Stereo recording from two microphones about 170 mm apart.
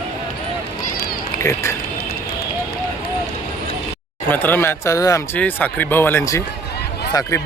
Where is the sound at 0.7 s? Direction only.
60° left (ahead or behind).